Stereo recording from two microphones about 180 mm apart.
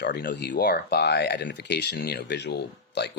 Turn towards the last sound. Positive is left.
turn(degrees=70)  # may be behind; listen again after turning